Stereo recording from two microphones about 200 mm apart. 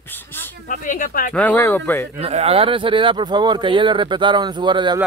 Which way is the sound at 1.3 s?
10° left (ahead or behind).